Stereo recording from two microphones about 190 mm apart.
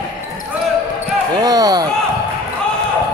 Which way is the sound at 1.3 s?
20° right (ahead or behind).